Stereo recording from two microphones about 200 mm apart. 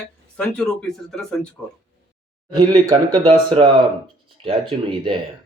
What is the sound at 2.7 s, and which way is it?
Speech, 20° right (ahead or behind).